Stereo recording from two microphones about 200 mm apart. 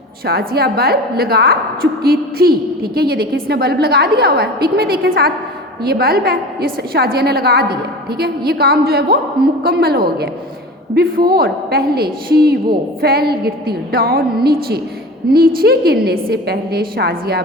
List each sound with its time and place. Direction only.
0.3 s a woman's voice: 50° right (ahead or behind)